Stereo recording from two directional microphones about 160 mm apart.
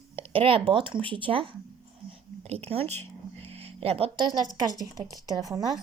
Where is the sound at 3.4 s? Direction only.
40° right (ahead or behind).